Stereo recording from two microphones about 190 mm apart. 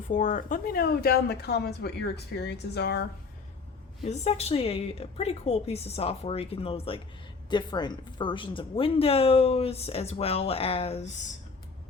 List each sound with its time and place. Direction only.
0.0 s speech: 40° left (ahead or behind); by 3.0 s 60° left (ahead or behind)
4.0 s a woman's voice: 35° left (ahead or behind)